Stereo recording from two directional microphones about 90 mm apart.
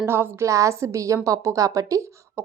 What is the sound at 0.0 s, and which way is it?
A woman's voice, 25° right (ahead or behind).